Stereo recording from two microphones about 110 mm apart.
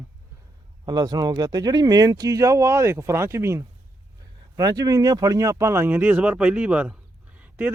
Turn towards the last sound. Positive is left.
turn(degrees=-15)  # may be behind; listen again after turning